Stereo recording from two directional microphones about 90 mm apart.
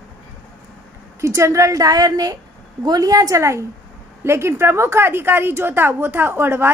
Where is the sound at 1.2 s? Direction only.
35° right (ahead or behind).